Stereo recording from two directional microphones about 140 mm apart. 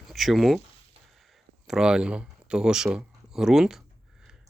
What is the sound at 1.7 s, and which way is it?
Speech, 5° right (ahead or behind).